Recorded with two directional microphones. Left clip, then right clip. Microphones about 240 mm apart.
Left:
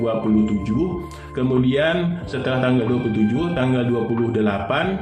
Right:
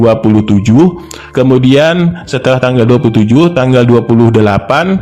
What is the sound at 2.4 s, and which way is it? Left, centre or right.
Speech, right.